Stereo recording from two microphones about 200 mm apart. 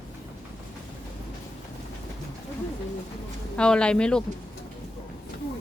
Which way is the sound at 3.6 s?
5° left (ahead or behind).